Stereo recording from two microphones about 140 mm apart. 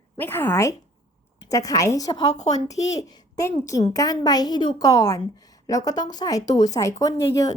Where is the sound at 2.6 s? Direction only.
25° left (ahead or behind).